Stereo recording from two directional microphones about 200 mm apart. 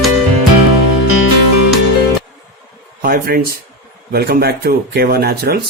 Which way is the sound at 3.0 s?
50° right (ahead or behind).